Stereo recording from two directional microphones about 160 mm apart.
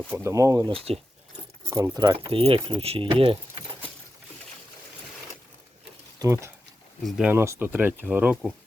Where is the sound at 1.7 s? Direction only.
20° right (ahead or behind).